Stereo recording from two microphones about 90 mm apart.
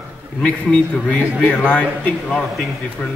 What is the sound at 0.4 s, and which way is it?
A man's voice, 15° left (ahead or behind).